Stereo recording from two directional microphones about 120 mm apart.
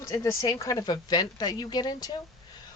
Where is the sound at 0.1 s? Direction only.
25° left (ahead or behind).